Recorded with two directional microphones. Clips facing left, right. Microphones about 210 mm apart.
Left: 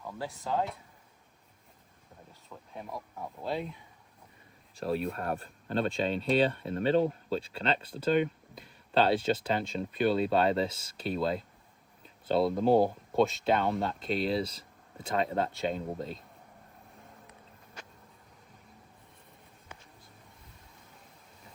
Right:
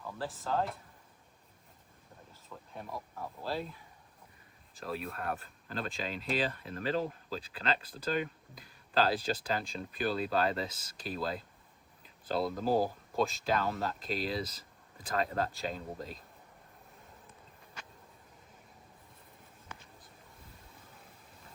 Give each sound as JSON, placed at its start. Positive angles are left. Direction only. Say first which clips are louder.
{"t": 0.4, "sound": "speech", "louder": "left 2 dB", "side_deg": 0}
{"t": 2.7, "sound": "speech", "louder": "left 2 dB", "side_deg": 0}
{"t": 4.8, "sound": "speech", "louder": "left 7 dB", "side_deg": 30}
{"t": 12.5, "sound": "speech", "louder": "left 6 dB", "side_deg": 25}